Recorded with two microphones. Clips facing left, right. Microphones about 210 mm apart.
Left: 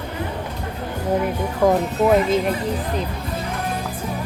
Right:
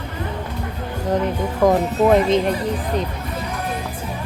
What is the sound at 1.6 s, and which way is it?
Speech, 5° left (ahead or behind).